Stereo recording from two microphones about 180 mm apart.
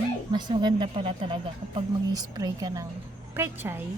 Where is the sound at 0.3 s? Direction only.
25° right (ahead or behind).